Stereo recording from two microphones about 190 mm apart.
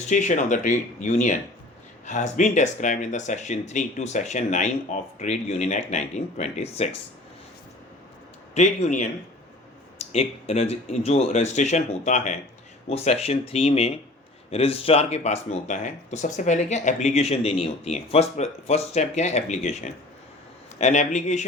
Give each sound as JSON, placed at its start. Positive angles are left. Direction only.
{"t": 0.1, "sound": "speech", "side_deg": 40}
{"t": 8.5, "sound": "speech", "side_deg": 35}